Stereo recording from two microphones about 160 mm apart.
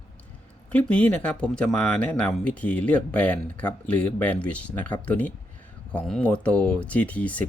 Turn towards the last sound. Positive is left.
turn(degrees=10)  # may be behind; listen again after turning